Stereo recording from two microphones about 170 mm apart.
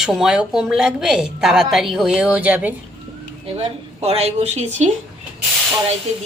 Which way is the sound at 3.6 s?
35° right (ahead or behind).